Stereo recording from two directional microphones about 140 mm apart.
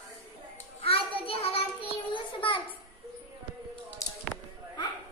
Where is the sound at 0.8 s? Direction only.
40° left (ahead or behind).